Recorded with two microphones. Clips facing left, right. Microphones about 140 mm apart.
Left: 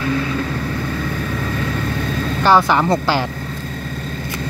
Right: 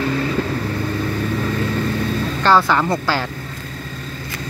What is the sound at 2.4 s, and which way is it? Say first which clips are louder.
Speech: left 2 dB; 15° left (ahead or behind).